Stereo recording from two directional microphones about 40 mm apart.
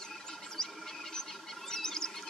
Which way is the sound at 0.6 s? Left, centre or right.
Centre.